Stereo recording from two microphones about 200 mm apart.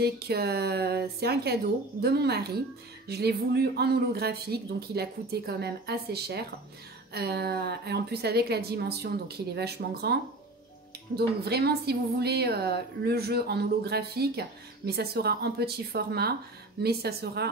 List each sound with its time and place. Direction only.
0.0 s speech: 55° right (ahead or behind)
11.1 s speech: 55° right (ahead or behind)